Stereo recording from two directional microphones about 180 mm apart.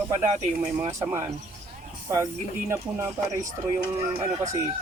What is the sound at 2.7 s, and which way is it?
Speech, 15° right (ahead or behind).